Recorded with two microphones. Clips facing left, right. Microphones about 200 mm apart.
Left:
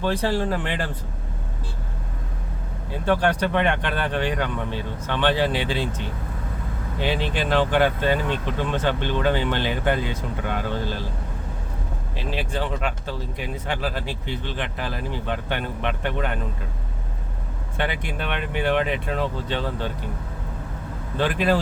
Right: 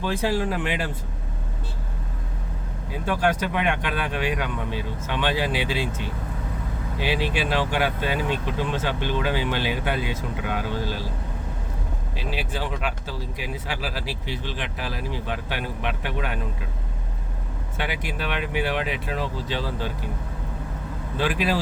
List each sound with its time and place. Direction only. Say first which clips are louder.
0.0 s speech: left 1 dB; 10° right (ahead or behind)
2.9 s speech: left 2 dB; 10° right (ahead or behind)
7.0 s speech: left 1 dB; 10° right (ahead or behind)
12.1 s speech: left 3 dB; 10° right (ahead or behind)
17.8 s speech: even; 5° right (ahead or behind)